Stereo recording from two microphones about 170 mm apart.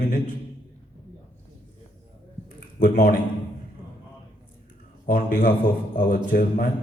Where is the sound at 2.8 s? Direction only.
55° left (ahead or behind).